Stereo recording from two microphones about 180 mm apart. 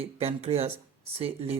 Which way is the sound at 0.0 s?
35° right (ahead or behind).